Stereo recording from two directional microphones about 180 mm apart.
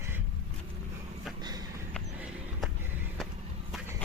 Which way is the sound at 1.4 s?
20° right (ahead or behind).